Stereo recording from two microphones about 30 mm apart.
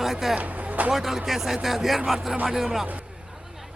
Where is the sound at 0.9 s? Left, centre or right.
Centre.